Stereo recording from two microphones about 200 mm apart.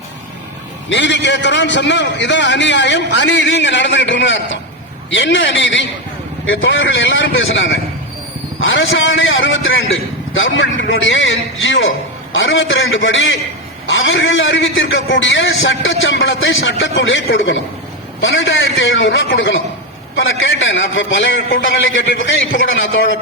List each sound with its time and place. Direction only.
0.9 s a man's voice: 65° left (ahead or behind)